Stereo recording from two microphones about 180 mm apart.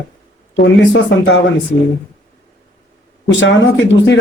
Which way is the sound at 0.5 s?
90° left.